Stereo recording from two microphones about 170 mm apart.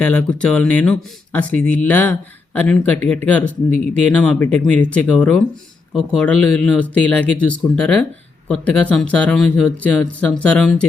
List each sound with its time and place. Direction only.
0.0 s speech: 5° left (ahead or behind)